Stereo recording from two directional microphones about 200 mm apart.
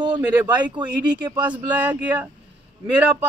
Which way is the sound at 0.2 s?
10° right (ahead or behind).